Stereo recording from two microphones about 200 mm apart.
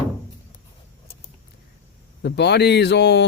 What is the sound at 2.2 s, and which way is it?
Speech, 55° left (ahead or behind).